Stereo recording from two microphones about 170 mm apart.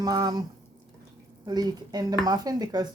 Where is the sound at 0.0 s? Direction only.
25° right (ahead or behind).